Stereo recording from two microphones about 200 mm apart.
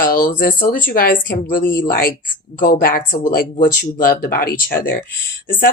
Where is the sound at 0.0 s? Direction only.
45° left (ahead or behind).